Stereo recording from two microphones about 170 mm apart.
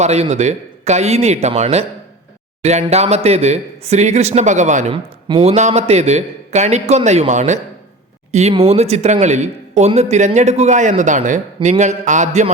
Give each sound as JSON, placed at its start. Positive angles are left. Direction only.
{"t": 0.0, "sound": "speech", "side_deg": -40}